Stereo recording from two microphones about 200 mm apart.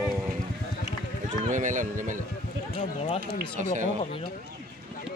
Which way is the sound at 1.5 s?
40° right (ahead or behind).